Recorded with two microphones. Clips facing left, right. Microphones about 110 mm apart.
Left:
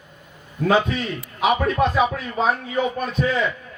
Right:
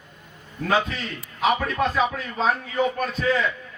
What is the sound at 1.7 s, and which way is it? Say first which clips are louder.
Speech: left 3 dB; 15° left (ahead or behind).